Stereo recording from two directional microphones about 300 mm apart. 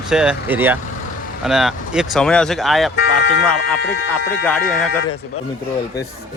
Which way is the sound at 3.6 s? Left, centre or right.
Left.